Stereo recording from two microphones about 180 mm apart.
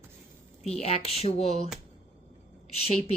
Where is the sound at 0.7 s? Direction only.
35° left (ahead or behind).